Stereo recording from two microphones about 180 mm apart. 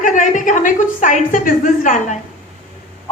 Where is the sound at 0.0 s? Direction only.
45° left (ahead or behind).